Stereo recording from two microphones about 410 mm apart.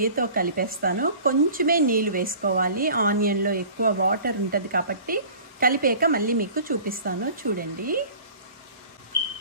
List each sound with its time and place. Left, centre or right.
0.0 s speech: right